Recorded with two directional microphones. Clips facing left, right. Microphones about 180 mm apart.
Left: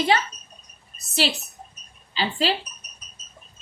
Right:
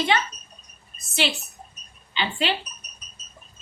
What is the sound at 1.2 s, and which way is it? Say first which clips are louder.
A woman's voice: even; 35° left (ahead or behind).